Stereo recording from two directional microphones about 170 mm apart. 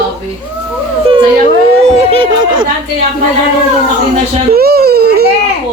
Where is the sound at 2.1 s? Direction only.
30° right (ahead or behind).